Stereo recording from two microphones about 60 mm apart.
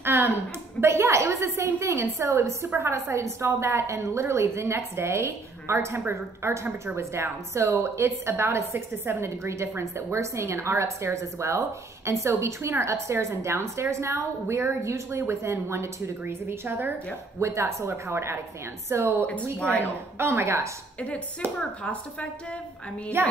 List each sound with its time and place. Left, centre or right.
0.0 s a woman's voice: right
17.4 s a woman's voice: right
23.2 s music: right